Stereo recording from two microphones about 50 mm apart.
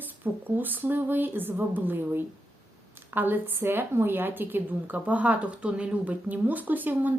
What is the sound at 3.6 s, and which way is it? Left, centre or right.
A woman's voice, right.